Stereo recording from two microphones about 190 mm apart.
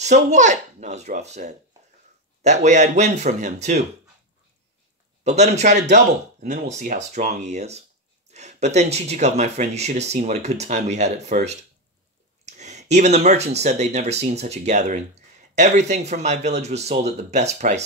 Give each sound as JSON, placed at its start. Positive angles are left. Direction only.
{"t": 0.0, "sound": "speech", "side_deg": -40}
{"t": 5.2, "sound": "speech", "side_deg": -35}